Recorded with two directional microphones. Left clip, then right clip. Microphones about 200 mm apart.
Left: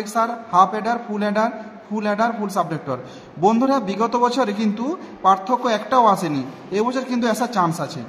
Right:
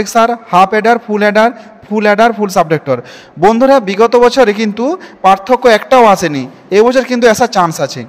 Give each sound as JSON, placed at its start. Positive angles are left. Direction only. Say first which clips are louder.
{"t": 0.0, "sound": "a man's voice", "louder": "right 11 dB", "side_deg": -45}